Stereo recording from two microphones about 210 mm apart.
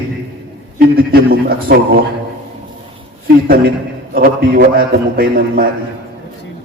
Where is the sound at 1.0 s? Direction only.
45° right (ahead or behind).